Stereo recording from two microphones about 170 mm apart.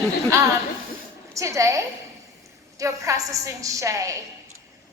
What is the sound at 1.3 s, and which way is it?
A woman's voice, 20° right (ahead or behind).